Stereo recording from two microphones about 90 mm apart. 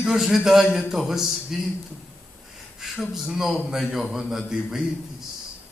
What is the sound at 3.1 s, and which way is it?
A man's voice, 5° right (ahead or behind).